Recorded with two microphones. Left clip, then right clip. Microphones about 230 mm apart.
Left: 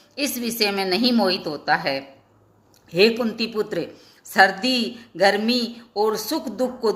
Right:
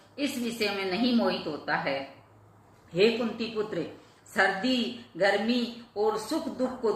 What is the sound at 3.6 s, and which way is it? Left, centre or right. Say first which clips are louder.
Speech: left 6 dB; left.